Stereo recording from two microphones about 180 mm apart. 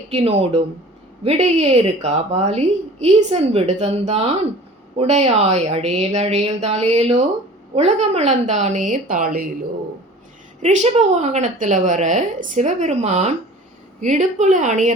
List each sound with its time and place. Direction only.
0.1 s a woman's voice: 35° right (ahead or behind); by 9.5 s 55° right (ahead or behind)
10.6 s a woman's voice: 40° right (ahead or behind)